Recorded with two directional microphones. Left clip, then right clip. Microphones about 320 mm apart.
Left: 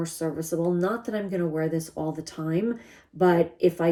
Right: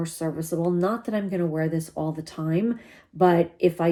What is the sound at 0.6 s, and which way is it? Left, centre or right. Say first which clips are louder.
Speech: right 2 dB; centre.